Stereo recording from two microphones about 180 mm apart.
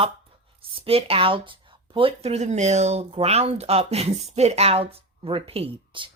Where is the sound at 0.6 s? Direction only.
30° right (ahead or behind).